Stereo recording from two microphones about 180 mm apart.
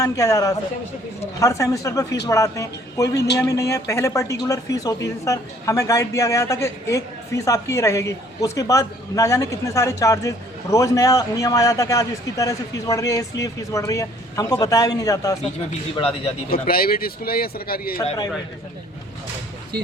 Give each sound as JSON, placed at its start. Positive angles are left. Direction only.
{"t": 0.0, "sound": "a man's voice", "side_deg": 20}
{"t": 16.0, "sound": "a man's voice", "side_deg": 35}
{"t": 16.6, "sound": "speech", "side_deg": 55}